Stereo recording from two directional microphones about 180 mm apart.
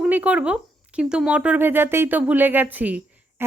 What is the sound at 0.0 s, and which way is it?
Speech, 10° right (ahead or behind).